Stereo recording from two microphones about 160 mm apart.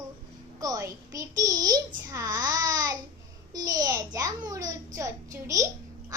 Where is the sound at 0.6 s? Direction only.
20° right (ahead or behind).